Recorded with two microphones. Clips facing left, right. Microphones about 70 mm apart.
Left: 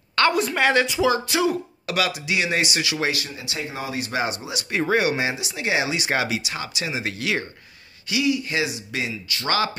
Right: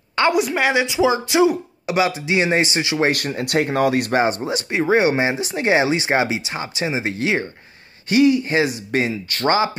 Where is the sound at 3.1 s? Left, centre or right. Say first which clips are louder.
Right 9 dB; right.